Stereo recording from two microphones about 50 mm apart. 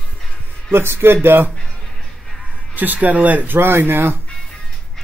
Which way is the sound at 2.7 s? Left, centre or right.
Right.